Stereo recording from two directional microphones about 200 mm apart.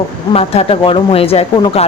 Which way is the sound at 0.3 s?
30° left (ahead or behind).